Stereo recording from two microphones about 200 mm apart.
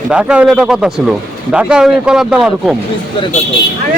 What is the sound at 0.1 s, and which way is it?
Speech, 5° right (ahead or behind).